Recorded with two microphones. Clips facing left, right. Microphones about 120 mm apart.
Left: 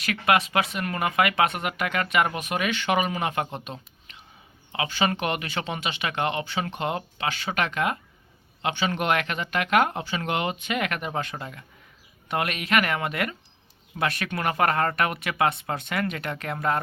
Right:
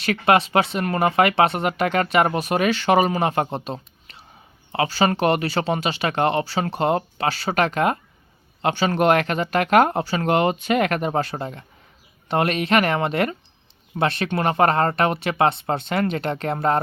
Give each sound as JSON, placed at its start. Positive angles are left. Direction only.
{"t": 0.0, "sound": "speech", "side_deg": -30}